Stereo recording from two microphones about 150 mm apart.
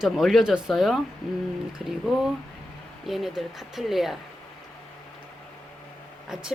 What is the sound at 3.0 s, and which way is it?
A woman's voice, centre (ahead or behind).